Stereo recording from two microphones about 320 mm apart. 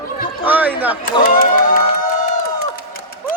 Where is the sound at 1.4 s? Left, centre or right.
Left.